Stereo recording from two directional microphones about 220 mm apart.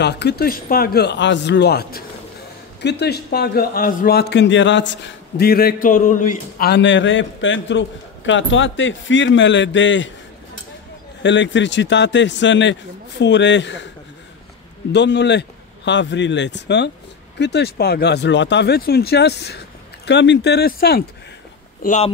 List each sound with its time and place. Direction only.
0.0 s a man's voice: 50° left (ahead or behind)
11.2 s a man's voice: 55° left (ahead or behind)
14.9 s a man's voice: 50° left (ahead or behind)
21.8 s speech: 35° left (ahead or behind)